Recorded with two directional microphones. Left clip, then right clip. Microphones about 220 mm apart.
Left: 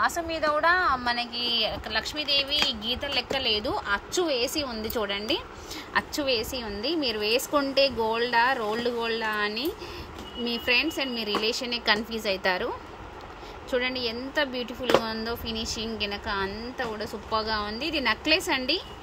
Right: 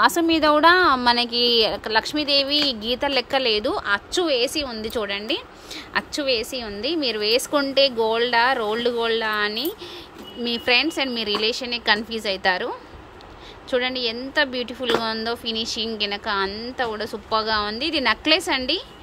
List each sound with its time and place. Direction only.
0.0 s a woman's voice: 35° right (ahead or behind); by 18.8 s 5° right (ahead or behind)